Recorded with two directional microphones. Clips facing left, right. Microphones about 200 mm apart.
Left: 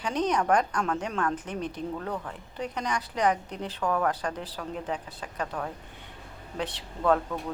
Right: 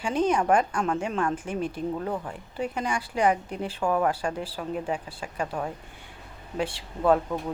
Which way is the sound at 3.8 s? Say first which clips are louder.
Right 2 dB; 20° right (ahead or behind).